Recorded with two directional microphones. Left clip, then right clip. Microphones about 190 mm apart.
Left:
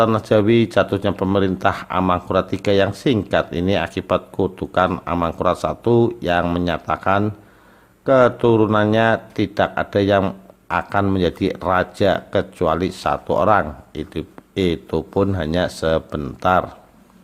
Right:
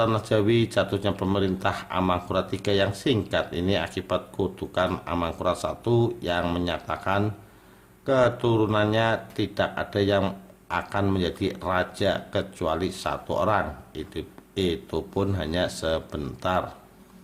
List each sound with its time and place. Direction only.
0.0 s speech: 35° left (ahead or behind)